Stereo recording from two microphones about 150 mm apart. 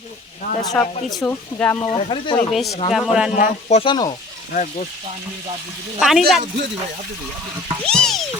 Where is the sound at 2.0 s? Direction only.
35° left (ahead or behind).